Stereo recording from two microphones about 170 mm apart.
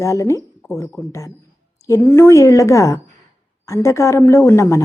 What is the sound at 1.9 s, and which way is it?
Speech, 15° left (ahead or behind).